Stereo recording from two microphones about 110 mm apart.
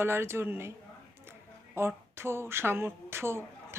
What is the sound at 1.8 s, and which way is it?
Speech, 20° right (ahead or behind).